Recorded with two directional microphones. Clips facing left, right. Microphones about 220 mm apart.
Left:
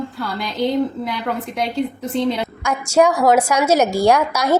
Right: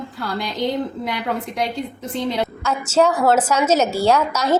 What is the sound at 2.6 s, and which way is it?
A woman's voice, 10° left (ahead or behind).